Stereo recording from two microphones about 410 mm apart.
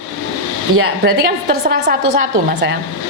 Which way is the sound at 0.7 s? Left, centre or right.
Right.